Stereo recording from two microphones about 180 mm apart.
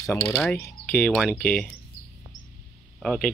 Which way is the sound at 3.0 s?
5° left (ahead or behind).